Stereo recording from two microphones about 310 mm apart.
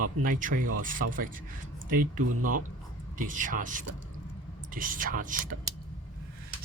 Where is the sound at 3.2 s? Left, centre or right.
Right.